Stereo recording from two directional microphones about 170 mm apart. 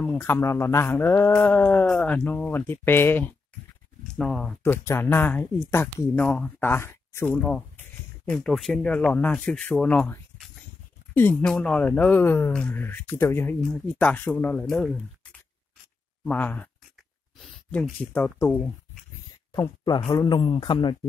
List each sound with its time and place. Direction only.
0.0 s speech: 10° left (ahead or behind)
16.3 s speech: 10° left (ahead or behind)
17.6 s speech: 10° left (ahead or behind)
19.5 s a man's voice: 20° left (ahead or behind)